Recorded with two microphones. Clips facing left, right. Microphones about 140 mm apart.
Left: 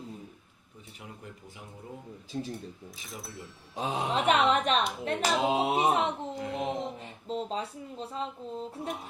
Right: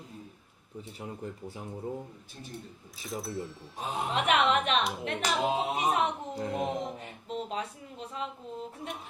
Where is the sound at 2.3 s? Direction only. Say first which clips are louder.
Left 13 dB; 90° left.